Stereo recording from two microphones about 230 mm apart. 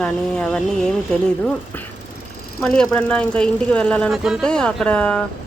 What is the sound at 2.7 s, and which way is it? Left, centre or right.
Speech, centre.